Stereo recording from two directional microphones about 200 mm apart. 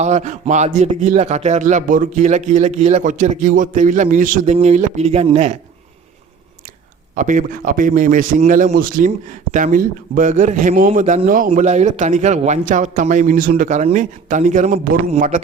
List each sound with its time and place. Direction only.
0.0 s speech: 35° right (ahead or behind)
7.2 s speech: 40° right (ahead or behind)